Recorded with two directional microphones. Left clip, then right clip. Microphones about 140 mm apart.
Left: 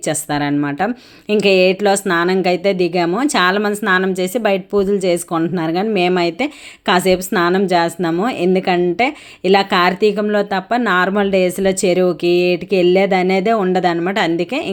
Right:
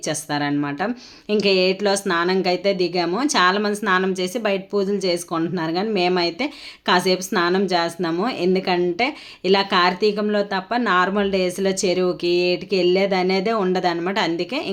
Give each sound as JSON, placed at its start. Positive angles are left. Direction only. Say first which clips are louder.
{"t": 0.0, "sound": "speech", "louder": "left 5 dB", "side_deg": 35}